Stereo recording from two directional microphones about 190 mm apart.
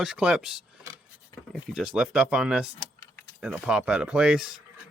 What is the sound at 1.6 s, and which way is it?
Speech, 5° right (ahead or behind).